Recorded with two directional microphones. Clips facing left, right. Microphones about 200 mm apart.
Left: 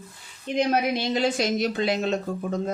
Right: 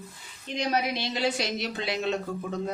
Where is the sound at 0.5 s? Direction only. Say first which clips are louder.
Left 5 dB; 50° left (ahead or behind).